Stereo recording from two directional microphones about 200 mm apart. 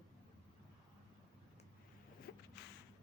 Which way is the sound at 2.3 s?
60° left (ahead or behind).